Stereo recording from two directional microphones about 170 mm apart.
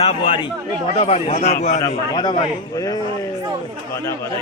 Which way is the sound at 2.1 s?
25° left (ahead or behind).